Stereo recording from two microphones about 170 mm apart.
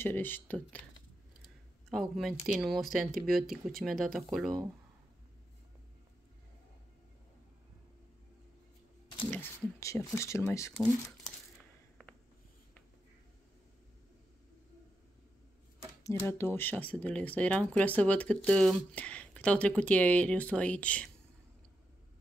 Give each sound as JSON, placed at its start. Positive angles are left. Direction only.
{"t": 0.0, "sound": "speech", "side_deg": 10}
{"t": 1.9, "sound": "speech", "side_deg": 0}
{"t": 9.3, "sound": "a sound", "side_deg": 15}
{"t": 10.1, "sound": "speech", "side_deg": 15}
{"t": 16.0, "sound": "speech", "side_deg": 15}